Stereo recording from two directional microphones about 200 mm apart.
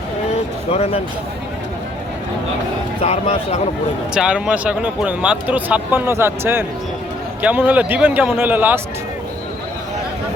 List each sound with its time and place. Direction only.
0.7 s speech: 30° left (ahead or behind)
3.0 s speech: 30° left (ahead or behind)
4.1 s speech: 5° right (ahead or behind)